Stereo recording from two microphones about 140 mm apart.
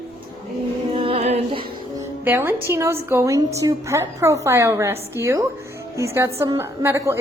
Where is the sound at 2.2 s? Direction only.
15° right (ahead or behind).